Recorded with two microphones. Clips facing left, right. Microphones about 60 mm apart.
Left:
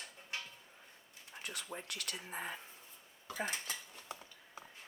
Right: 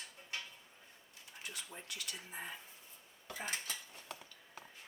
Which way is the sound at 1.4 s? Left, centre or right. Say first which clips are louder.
Left 4 dB; left.